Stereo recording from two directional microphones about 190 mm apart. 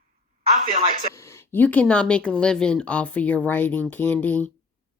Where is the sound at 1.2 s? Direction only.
15° left (ahead or behind).